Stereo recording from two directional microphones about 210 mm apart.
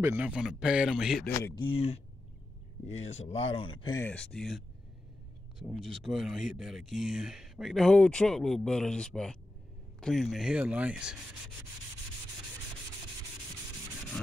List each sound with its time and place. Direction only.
0.0 s speech: 10° right (ahead or behind)
1.3 s speech: 10° left (ahead or behind)
1.6 s speech: 25° left (ahead or behind)
3.0 s speech: 30° left (ahead or behind); by 11.1 s 5° right (ahead or behind)